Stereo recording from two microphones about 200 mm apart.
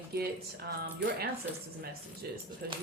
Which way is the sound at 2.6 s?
50° right (ahead or behind).